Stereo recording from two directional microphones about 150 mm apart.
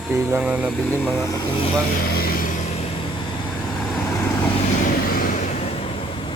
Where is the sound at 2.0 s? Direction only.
85° left; by 2.8 s 60° left (ahead or behind).